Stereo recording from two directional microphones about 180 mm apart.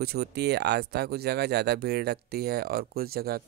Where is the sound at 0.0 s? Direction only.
65° right (ahead or behind).